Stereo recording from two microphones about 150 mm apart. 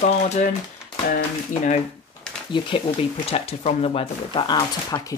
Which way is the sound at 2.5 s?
35° left (ahead or behind).